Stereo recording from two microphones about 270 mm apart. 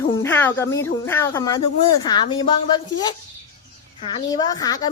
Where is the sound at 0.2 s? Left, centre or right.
Centre.